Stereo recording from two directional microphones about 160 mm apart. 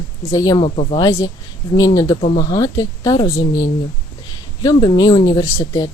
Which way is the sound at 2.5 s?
25° left (ahead or behind).